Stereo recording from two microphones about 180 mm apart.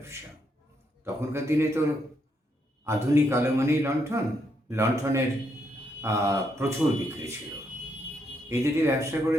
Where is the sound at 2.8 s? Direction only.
15° right (ahead or behind).